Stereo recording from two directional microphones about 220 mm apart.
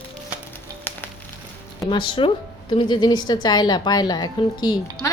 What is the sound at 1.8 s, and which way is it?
A woman's voice, 20° left (ahead or behind).